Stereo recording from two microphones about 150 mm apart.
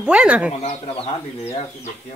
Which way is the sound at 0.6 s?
40° left (ahead or behind).